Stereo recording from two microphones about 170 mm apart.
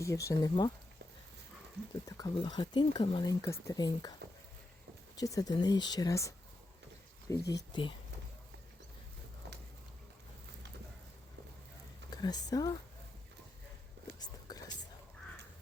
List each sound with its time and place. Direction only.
0.0 s speech: 15° left (ahead or behind)
2.0 s speech: 20° left (ahead or behind)
5.2 s speech: 20° left (ahead or behind)
12.1 s speech: 25° left (ahead or behind)
14.2 s whispering: 25° left (ahead or behind)